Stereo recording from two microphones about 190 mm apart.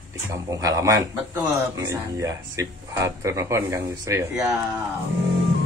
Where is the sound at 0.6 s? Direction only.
15° right (ahead or behind).